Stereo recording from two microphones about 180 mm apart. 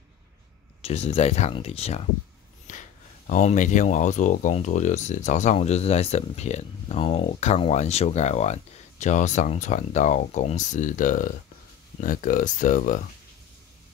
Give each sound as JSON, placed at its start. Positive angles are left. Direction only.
{"t": 0.8, "sound": "speech", "side_deg": 35}
{"t": 2.7, "sound": "gasp", "side_deg": 45}
{"t": 3.3, "sound": "speech", "side_deg": 40}